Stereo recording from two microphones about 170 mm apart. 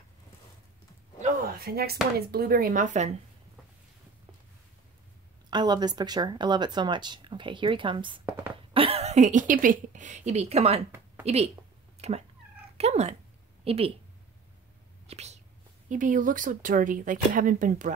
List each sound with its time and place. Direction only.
1.2 s speech: 55° right (ahead or behind)
5.5 s speech: 25° right (ahead or behind)
12.7 s cat: 40° right (ahead or behind)
13.7 s speech: 35° right (ahead or behind)
15.0 s whispering: 40° right (ahead or behind)
15.9 s speech: 50° right (ahead or behind)